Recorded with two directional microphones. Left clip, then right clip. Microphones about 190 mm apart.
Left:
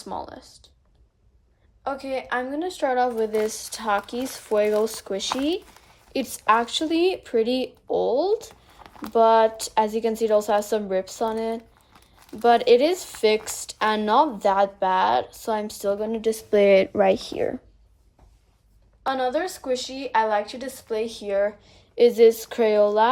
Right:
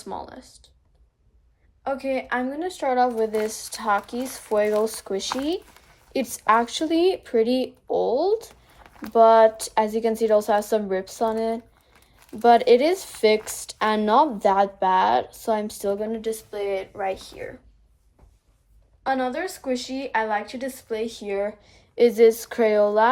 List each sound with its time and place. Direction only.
0.0 s speech: 10° left (ahead or behind)
1.8 s speech: 10° left (ahead or behind)
11.9 s a sound: 10° left (ahead or behind)
12.3 s speech: centre (ahead or behind); by 16.6 s 30° left (ahead or behind)
16.9 s speech: 85° left
19.0 s speech: 10° left (ahead or behind)